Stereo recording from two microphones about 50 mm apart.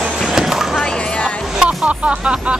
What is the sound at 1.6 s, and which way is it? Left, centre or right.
Speech, right.